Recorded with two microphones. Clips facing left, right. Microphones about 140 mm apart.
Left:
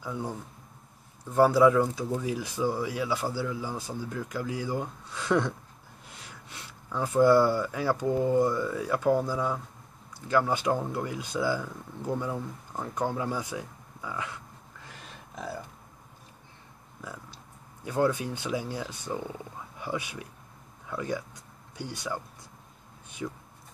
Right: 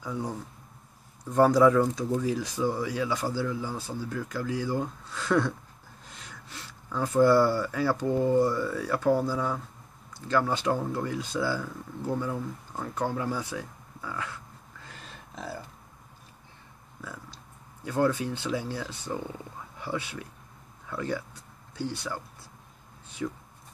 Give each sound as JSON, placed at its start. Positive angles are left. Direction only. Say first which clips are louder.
{"t": 0.0, "sound": "speech", "louder": "right 1 dB", "side_deg": 5}
{"t": 1.3, "sound": "speech", "louder": "even", "side_deg": 5}
{"t": 17.0, "sound": "a sound", "louder": "even", "side_deg": 10}
{"t": 17.8, "sound": "speech", "louder": "right 1 dB", "side_deg": 15}